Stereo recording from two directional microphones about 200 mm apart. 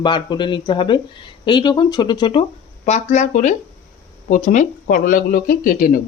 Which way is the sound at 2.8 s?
35° left (ahead or behind).